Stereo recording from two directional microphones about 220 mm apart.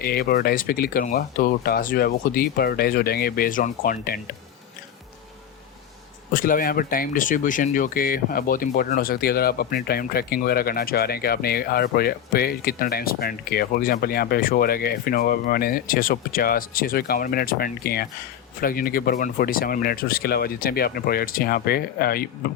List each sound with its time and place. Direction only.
0.0 s speech: 45° left (ahead or behind)
6.3 s speech: 40° left (ahead or behind)